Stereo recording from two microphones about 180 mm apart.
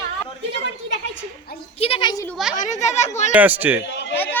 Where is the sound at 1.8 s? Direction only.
30° left (ahead or behind).